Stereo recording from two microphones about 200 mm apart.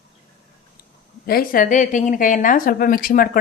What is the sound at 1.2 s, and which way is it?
Speech, 50° left (ahead or behind).